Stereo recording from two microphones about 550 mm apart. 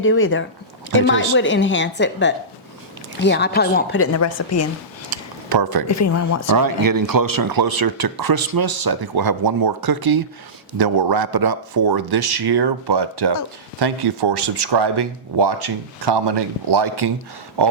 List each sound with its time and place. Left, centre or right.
0.0 s speech: left
5.1 s a sound: right
5.9 s speech: left
6.5 s speech: right